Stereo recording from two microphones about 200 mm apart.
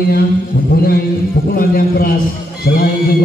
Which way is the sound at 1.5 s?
45° left (ahead or behind).